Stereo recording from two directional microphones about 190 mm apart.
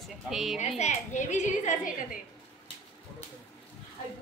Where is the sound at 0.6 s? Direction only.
35° left (ahead or behind).